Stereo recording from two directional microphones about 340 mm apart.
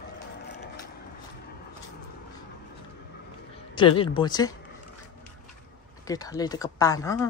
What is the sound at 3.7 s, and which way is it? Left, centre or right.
Speech, centre.